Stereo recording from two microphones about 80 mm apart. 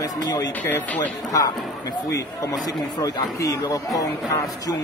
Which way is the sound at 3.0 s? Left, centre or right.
Left.